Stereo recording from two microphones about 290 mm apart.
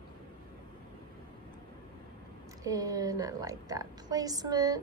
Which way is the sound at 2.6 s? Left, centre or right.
Centre.